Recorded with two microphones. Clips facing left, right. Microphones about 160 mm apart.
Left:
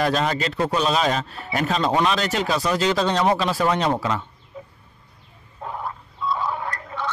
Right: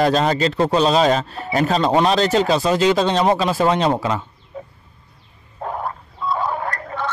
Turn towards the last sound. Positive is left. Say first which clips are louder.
# right 4 dB
turn(degrees=-55)  # may be behind; listen again after turning